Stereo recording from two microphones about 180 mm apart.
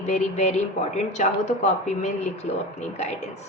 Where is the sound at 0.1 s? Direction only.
40° left (ahead or behind).